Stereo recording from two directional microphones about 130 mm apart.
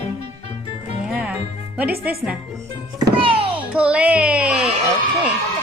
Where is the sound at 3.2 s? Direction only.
45° right (ahead or behind).